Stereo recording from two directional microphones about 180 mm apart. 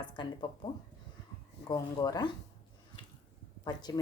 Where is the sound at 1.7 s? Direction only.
20° left (ahead or behind).